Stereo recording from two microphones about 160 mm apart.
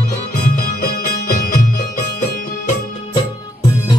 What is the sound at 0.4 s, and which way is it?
Music, 65° left (ahead or behind).